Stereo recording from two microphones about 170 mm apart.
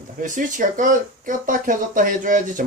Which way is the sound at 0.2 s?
50° right (ahead or behind).